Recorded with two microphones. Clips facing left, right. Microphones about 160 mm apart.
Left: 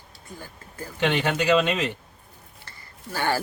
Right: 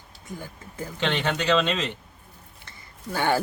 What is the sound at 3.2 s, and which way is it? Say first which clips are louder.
Speech: right 2 dB; 20° right (ahead or behind).